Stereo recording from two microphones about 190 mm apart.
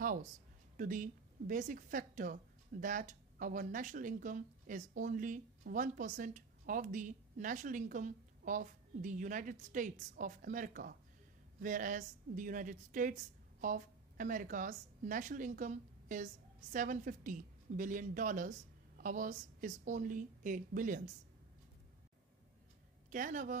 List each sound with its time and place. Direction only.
0.0 s a sound: 45° right (ahead or behind)
0.7 s a woman's voice: 45° right (ahead or behind)
23.0 s speech: 45° right (ahead or behind)